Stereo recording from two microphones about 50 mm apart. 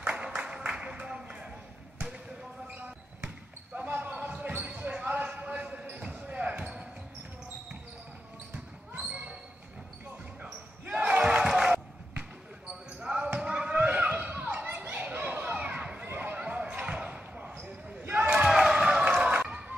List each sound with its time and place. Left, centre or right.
0.0 s music: right
3.7 s basketball bounce: right
11.0 s crowd: right
11.4 s a sound: centre
13.0 s basketball bounce: centre
13.4 s a sound: centre
16.1 s basketball bounce: right
17.6 s basketball bounce: right
18.5 s a sound: centre